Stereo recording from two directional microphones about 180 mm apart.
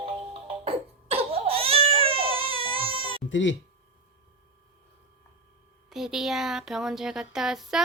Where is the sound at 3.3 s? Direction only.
90° left.